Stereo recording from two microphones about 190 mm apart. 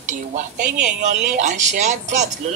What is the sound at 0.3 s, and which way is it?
Speech, 40° right (ahead or behind).